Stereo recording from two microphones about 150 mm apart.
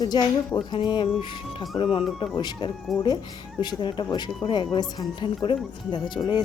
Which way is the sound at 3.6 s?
30° left (ahead or behind).